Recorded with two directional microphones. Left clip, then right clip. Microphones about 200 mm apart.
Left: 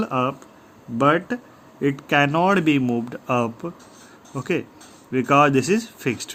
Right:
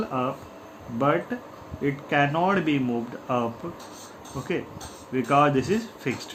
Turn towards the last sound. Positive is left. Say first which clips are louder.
# left 4 dB
turn(degrees=50)  # may be behind; listen again after turning